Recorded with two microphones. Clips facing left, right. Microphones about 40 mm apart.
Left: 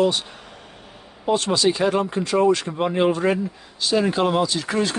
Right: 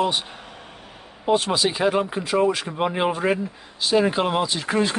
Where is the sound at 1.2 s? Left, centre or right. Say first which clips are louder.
Left 1 dB; centre.